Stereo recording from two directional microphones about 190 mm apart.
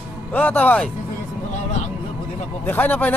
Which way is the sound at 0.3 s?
10° left (ahead or behind).